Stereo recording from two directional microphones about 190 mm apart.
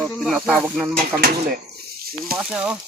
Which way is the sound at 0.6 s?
5° right (ahead or behind).